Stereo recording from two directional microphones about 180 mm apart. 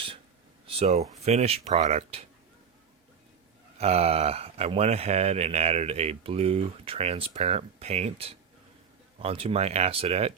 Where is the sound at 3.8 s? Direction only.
35° right (ahead or behind).